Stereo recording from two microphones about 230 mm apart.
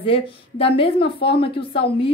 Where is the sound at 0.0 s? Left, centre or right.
Left.